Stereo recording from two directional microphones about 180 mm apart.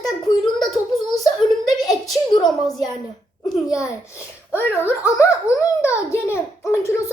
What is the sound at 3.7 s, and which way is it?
A child's voice, 15° left (ahead or behind).